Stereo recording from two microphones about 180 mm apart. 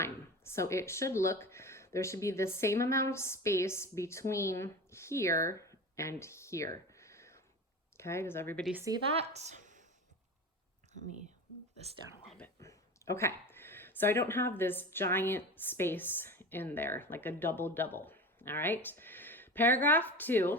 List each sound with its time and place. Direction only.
0.0 s speech: 15° left (ahead or behind)
6.9 s a sound: 15° left (ahead or behind)
7.9 s speech: 15° left (ahead or behind)
9.2 s a woman's voice: 40° right (ahead or behind)
12.5 s speech: 15° left (ahead or behind)